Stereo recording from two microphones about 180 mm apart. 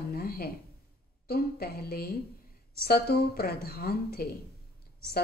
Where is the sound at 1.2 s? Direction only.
60° left (ahead or behind).